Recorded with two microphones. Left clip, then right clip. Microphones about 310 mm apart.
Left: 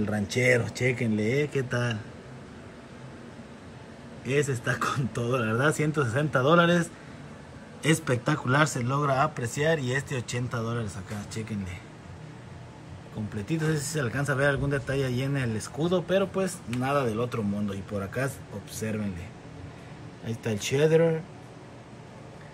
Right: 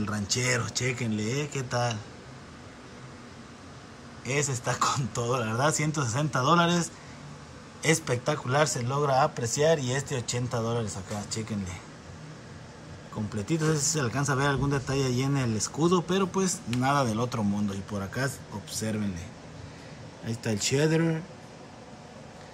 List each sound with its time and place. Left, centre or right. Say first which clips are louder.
0.0 s a man's voice: left 4 dB; centre
4.3 s a man's voice: left 2 dB; centre
13.5 s a man's voice: right 2 dB; centre
17.6 s a man's voice: left 1 dB; centre
20.2 s a man's voice: right 1 dB; centre